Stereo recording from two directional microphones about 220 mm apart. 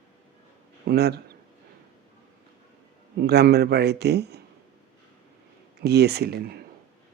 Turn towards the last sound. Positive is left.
turn(degrees=-45)  # may be behind; listen again after turning